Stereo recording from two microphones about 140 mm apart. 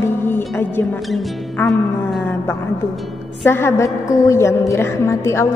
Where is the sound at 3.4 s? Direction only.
15° left (ahead or behind).